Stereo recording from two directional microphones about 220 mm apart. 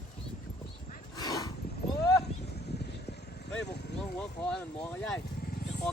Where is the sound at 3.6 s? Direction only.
50° left (ahead or behind).